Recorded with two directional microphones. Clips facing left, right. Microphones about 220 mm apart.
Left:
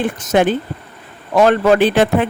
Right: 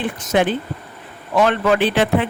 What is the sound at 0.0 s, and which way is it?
Speech, 45° left (ahead or behind).